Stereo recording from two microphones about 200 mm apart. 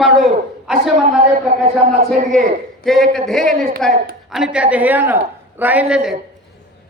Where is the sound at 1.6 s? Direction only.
30° right (ahead or behind).